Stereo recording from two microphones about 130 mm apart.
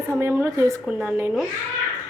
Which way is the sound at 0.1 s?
20° right (ahead or behind).